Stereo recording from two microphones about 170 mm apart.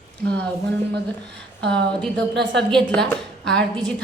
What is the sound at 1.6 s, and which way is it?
Speech, 90° right.